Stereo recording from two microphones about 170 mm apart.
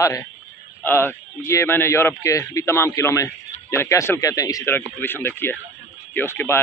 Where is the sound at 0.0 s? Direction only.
20° left (ahead or behind).